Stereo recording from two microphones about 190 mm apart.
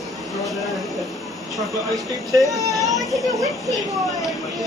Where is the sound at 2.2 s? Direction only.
15° right (ahead or behind).